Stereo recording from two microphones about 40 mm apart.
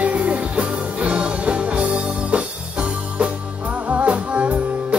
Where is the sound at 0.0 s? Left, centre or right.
Right.